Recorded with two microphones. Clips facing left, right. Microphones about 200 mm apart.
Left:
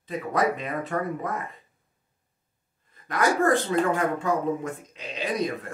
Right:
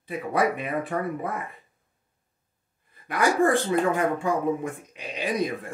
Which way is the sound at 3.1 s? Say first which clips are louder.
Right 1 dB; 15° right (ahead or behind).